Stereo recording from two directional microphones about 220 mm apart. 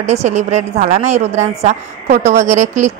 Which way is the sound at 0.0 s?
30° right (ahead or behind).